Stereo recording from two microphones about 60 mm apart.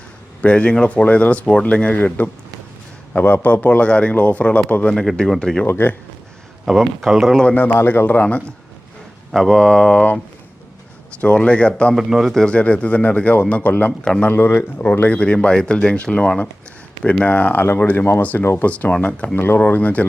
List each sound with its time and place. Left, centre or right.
0.4 s a man's voice: centre
5.6 s speech: left
6.7 s speech: centre
7.5 s a man's voice: left
9.3 s speech: centre
11.2 s a man's voice: centre
11.9 s speech: centre
12.3 s a man's voice: centre
14.0 s speech: centre
14.3 s speech: left
15.0 s speech: centre
17.2 s a man's voice: left